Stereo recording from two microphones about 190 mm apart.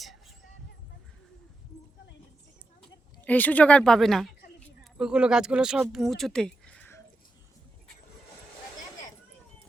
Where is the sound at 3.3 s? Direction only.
10° left (ahead or behind).